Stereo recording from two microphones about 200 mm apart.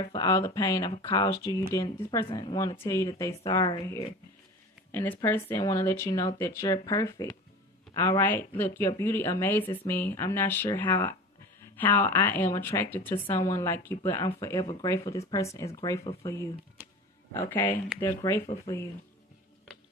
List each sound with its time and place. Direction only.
0.0 s a woman's voice: 20° left (ahead or behind)
4.9 s a woman's voice: 10° left (ahead or behind)
16.0 s speech: 30° left (ahead or behind)
18.0 s a woman's voice: 15° left (ahead or behind)